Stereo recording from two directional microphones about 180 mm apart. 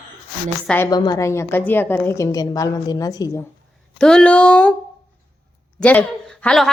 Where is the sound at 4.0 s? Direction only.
5° left (ahead or behind).